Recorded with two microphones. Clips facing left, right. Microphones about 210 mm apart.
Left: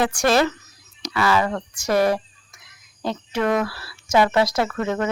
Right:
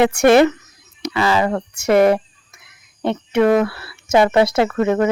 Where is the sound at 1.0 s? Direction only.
25° right (ahead or behind).